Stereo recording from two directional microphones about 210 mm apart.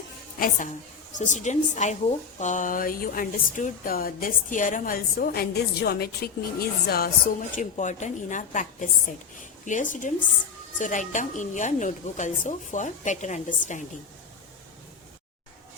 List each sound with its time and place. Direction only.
0.3 s a woman's voice: 40° left (ahead or behind)